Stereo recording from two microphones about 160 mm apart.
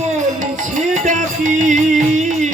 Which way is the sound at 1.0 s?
50° right (ahead or behind).